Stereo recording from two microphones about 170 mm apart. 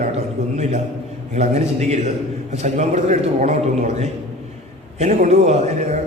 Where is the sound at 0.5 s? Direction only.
40° right (ahead or behind).